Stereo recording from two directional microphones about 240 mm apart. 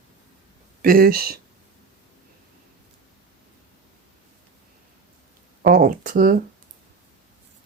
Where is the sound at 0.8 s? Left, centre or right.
Right.